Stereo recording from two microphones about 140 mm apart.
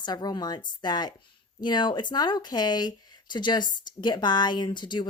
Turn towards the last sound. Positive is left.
turn(degrees=35)  # may be behind; listen again after turning